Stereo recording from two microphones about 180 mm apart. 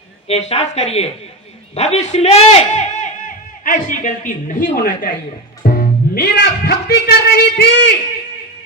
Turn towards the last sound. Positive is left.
turn(degrees=65)  # may be behind; listen again after turning